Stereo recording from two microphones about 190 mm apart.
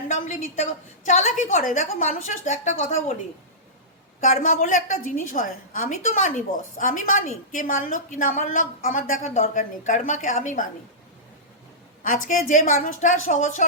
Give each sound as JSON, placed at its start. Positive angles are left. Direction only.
{"t": 0.1, "sound": "a woman's voice", "side_deg": 40}
{"t": 4.2, "sound": "a woman's voice", "side_deg": 45}
{"t": 12.0, "sound": "a woman's voice", "side_deg": 45}